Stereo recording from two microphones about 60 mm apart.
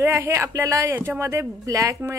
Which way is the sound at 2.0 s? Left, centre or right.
Right.